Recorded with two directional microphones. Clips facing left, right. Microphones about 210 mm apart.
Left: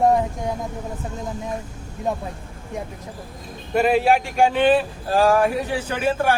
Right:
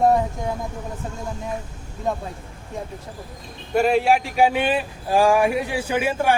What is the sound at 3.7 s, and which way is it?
Speech, centre (ahead or behind).